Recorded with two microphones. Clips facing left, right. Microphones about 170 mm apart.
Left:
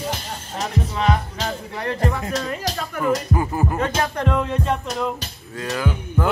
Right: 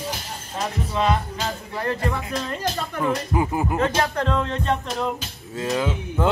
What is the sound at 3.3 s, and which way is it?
Speech, 15° right (ahead or behind).